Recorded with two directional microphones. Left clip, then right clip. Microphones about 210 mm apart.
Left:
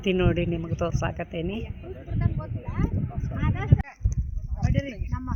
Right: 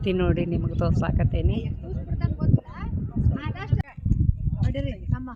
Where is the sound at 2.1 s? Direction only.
15° left (ahead or behind).